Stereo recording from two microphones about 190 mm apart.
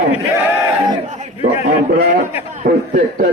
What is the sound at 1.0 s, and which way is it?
Chatter, 35° right (ahead or behind).